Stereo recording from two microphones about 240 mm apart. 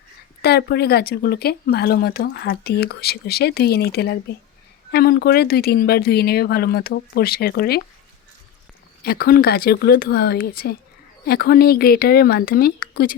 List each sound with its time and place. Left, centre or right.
0.4 s speech: left
9.0 s speech: left